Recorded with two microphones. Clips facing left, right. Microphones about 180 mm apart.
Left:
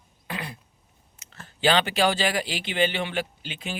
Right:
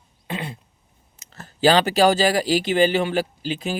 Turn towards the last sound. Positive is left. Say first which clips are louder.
# right 9 dB
turn(degrees=-40)  # may be behind; listen again after turning